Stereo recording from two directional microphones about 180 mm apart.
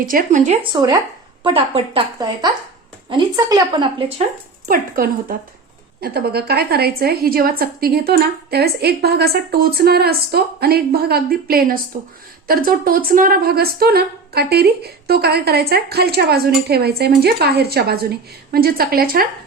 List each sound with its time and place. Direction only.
0.0 s speech: 50° right (ahead or behind)
0.6 s a woman's voice: 25° right (ahead or behind)
1.5 s a woman's voice: 30° right (ahead or behind)
4.7 s a woman's voice: 50° right (ahead or behind)